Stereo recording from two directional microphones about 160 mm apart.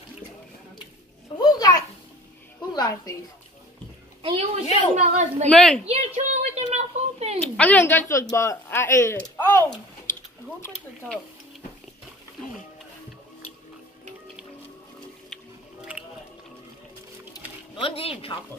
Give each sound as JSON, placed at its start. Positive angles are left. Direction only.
{"t": 1.4, "sound": "a sound", "side_deg": 25}
{"t": 2.7, "sound": "a woman's voice", "side_deg": 25}
{"t": 4.2, "sound": "a woman's voice", "side_deg": -35}
{"t": 5.5, "sound": "a woman's voice", "side_deg": 5}
{"t": 5.9, "sound": "a sound", "side_deg": -40}
{"t": 7.4, "sound": "speech", "side_deg": 10}
{"t": 17.3, "sound": "music", "side_deg": 35}